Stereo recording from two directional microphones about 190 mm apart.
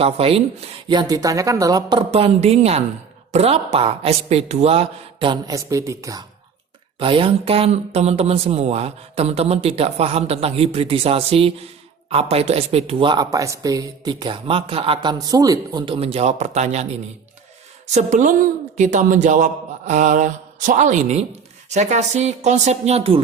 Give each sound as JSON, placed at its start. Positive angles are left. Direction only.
{"t": 0.0, "sound": "speech", "side_deg": -30}
{"t": 2.0, "sound": "speech", "side_deg": -35}
{"t": 7.0, "sound": "speech", "side_deg": -25}